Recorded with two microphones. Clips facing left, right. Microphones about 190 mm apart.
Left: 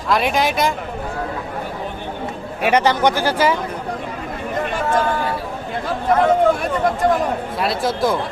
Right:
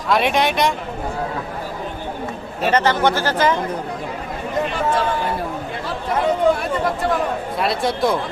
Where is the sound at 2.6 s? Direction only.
10° left (ahead or behind).